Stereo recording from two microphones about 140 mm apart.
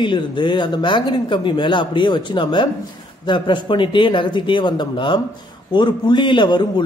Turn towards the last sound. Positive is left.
turn(degrees=30)  # may be behind; listen again after turning